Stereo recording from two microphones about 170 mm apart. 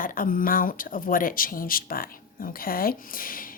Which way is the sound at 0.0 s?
55° left (ahead or behind).